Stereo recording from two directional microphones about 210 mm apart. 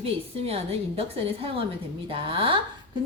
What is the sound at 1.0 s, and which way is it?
Speech, 25° right (ahead or behind).